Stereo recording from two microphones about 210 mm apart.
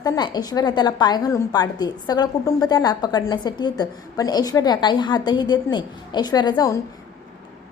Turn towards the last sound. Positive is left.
turn(degrees=15)  # may be behind; listen again after turning